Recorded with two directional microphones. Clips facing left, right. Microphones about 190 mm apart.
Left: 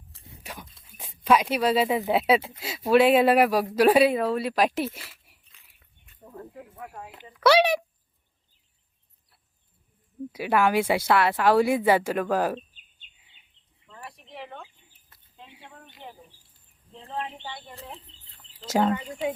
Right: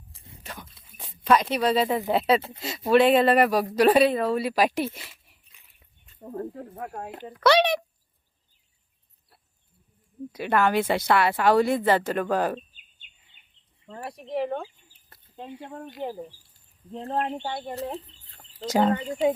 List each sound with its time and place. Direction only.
0.4 s a sound: 10° left (ahead or behind)
0.7 s speech: centre (ahead or behind)
4.9 s dog: 5° left (ahead or behind)
5.5 s dog: 15° right (ahead or behind)
6.1 s speech: 40° right (ahead or behind)
7.3 s a woman's voice: 5° left (ahead or behind)
10.3 s a woman's voice: 5° left (ahead or behind)
13.8 s speech: 40° right (ahead or behind)
18.7 s speech: centre (ahead or behind)